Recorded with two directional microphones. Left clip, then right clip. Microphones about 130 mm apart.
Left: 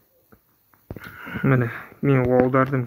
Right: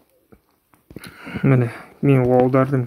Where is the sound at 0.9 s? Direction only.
30° right (ahead or behind).